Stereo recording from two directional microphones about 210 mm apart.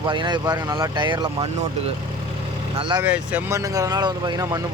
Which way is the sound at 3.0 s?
5° right (ahead or behind).